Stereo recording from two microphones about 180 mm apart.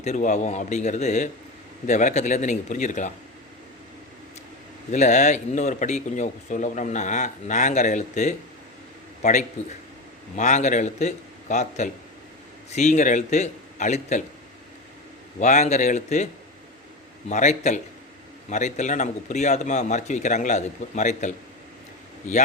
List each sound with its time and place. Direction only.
0.0 s speech: 40° left (ahead or behind)
4.9 s speech: 40° left (ahead or behind)
15.4 s speech: 40° left (ahead or behind)